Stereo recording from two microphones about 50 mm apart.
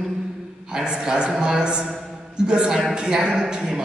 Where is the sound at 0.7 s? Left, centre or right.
Centre.